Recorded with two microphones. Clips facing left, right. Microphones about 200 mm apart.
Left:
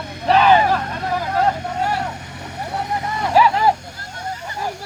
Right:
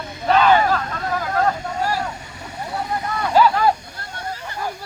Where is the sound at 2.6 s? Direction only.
20° left (ahead or behind).